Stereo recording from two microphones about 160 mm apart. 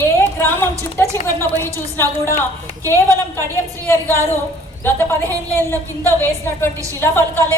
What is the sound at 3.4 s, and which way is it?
Speech, 15° left (ahead or behind).